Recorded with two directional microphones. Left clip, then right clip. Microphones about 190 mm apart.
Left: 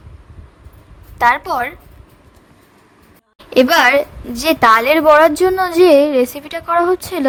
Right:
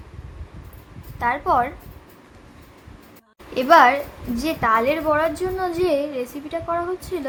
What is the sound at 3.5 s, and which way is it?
A woman's voice, 60° left (ahead or behind).